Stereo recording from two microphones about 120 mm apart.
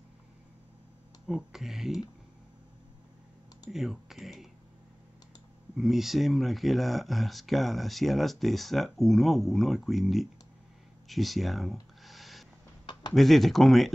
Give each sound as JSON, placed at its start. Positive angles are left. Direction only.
{"t": 1.2, "sound": "speech", "side_deg": -5}
{"t": 3.7, "sound": "speech", "side_deg": 0}
{"t": 5.8, "sound": "speech", "side_deg": 0}
{"t": 11.1, "sound": "a sound", "side_deg": 0}
{"t": 13.1, "sound": "speech", "side_deg": 0}